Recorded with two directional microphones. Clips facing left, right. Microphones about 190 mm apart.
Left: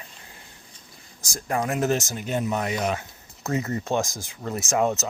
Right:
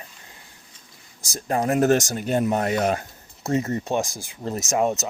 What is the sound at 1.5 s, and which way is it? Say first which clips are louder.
Speech: right 3 dB; 30° right (ahead or behind).